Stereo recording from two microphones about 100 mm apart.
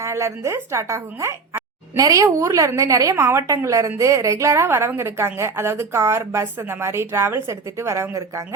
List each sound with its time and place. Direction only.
0.0 s a woman's voice: 30° right (ahead or behind)